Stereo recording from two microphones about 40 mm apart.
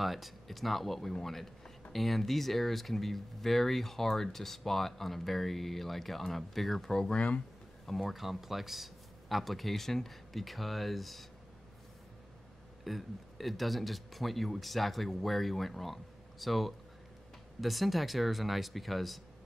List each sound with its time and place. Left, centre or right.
0.0 s speech: centre
7.2 s speech: left
7.8 s speech: centre
8.1 s speech: centre
12.8 s speech: centre